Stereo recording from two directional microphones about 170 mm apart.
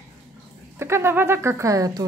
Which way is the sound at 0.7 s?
15° right (ahead or behind).